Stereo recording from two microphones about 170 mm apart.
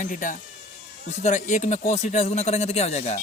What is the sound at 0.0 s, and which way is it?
Speech, 50° left (ahead or behind).